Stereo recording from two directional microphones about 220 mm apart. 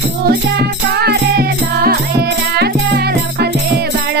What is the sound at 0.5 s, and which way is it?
Music, 45° right (ahead or behind).